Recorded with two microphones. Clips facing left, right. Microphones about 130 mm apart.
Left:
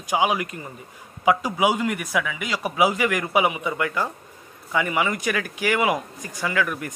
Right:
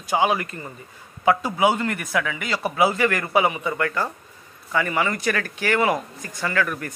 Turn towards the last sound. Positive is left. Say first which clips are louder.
# even
turn(degrees=10)  # may be behind; listen again after turning